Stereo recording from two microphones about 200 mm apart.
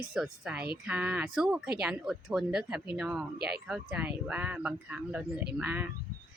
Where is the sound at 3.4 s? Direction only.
50° right (ahead or behind).